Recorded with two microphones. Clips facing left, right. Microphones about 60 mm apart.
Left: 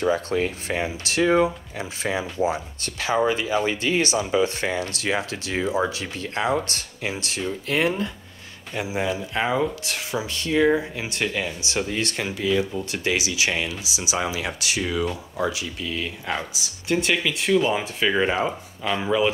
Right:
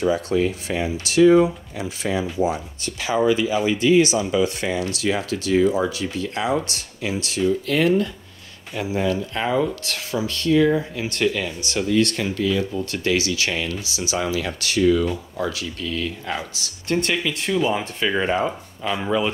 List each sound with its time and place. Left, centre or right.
0.0 s speech: left
1.8 s speech: left
12.4 s speech: centre